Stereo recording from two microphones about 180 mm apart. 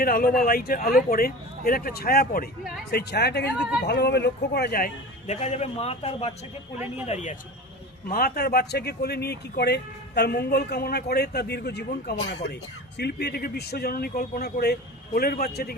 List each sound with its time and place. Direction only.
0.0 s speech: 55° left (ahead or behind)
5.2 s a man's voice: 40° left (ahead or behind)
8.0 s speech: 55° left (ahead or behind)